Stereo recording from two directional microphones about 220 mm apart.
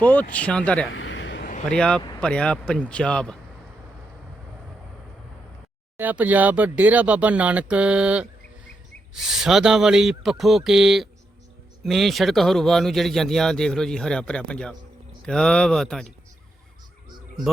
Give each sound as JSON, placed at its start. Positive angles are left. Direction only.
{"t": 0.0, "sound": "speech", "side_deg": 10}
{"t": 0.9, "sound": "a sound", "side_deg": 60}
{"t": 1.7, "sound": "speech", "side_deg": 5}
{"t": 6.0, "sound": "speech", "side_deg": -5}